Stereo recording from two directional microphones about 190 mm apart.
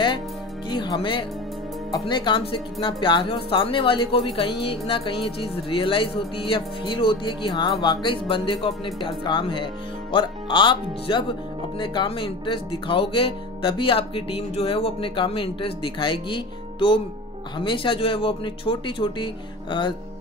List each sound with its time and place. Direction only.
0.7 s speech: 25° left (ahead or behind)